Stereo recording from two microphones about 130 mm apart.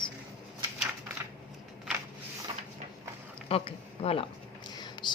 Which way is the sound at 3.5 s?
45° left (ahead or behind).